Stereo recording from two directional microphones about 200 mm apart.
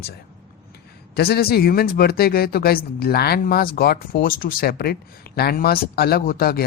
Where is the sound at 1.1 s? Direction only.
50° left (ahead or behind).